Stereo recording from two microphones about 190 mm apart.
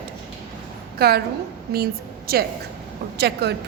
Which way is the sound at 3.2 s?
60° right (ahead or behind).